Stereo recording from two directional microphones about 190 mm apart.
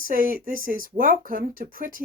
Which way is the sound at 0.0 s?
45° right (ahead or behind).